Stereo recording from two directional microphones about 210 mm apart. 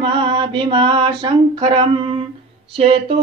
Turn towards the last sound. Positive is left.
turn(degrees=-25)  # may be behind; listen again after turning